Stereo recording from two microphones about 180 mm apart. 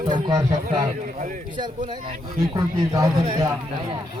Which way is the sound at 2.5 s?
20° right (ahead or behind).